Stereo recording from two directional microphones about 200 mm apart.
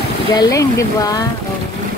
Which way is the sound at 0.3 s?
15° left (ahead or behind).